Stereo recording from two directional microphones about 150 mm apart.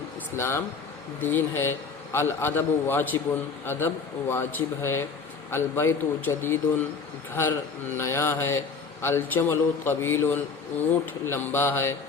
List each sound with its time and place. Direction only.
0.3 s a man's voice: 15° left (ahead or behind)
7.9 s a man's voice: 15° left (ahead or behind)